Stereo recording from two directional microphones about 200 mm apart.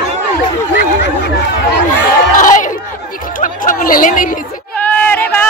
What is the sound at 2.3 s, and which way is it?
Crowd, 40° left (ahead or behind).